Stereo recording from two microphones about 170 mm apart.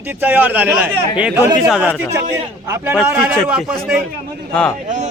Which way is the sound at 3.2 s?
5° right (ahead or behind).